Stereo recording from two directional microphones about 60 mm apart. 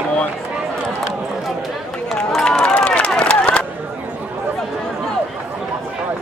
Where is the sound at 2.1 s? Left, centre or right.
Centre.